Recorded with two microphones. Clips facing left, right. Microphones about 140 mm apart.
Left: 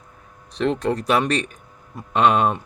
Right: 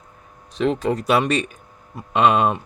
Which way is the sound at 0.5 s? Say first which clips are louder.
Right 1 dB; centre (ahead or behind).